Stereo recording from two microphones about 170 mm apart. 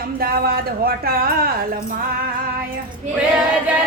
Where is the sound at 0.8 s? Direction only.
60° right (ahead or behind).